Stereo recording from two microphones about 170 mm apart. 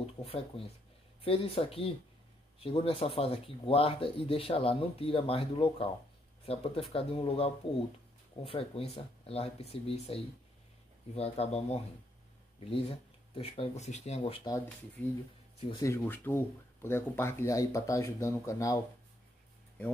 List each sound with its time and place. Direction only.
0.0 s speech: 35° left (ahead or behind)
14.2 s speech: 25° left (ahead or behind)
15.7 s speech: 15° left (ahead or behind)